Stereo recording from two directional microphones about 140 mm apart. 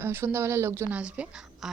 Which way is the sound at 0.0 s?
15° right (ahead or behind).